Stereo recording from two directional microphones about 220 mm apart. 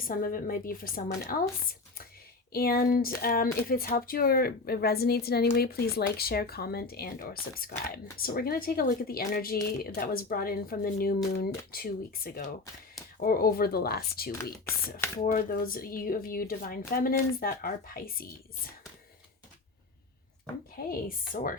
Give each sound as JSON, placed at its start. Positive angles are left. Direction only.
{"t": 0.1, "sound": "speech", "side_deg": 40}
{"t": 2.5, "sound": "speech", "side_deg": 45}
{"t": 20.7, "sound": "speech", "side_deg": 40}